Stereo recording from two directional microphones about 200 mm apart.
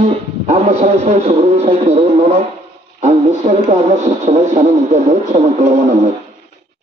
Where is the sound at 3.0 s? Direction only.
35° right (ahead or behind).